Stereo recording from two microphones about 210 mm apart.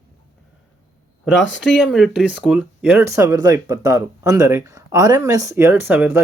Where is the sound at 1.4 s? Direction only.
60° left (ahead or behind).